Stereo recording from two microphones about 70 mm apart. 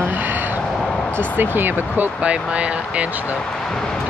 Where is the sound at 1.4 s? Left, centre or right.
Right.